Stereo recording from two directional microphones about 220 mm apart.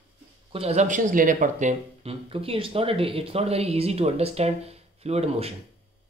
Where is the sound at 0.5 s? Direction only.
25° right (ahead or behind).